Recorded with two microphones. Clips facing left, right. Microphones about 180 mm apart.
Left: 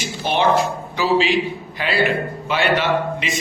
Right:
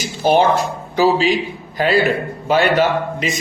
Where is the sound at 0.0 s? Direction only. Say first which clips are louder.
Right 5 dB; 40° right (ahead or behind).